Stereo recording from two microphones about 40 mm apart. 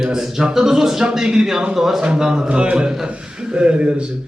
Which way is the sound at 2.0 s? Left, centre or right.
Right.